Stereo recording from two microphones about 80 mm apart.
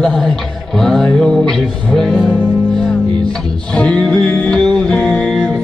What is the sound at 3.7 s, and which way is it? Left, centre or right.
Music, centre.